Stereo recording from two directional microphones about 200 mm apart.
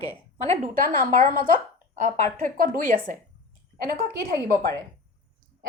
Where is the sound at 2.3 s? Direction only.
40° right (ahead or behind).